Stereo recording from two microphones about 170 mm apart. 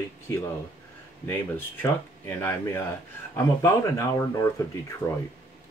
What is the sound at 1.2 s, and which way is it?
Speech, 10° left (ahead or behind).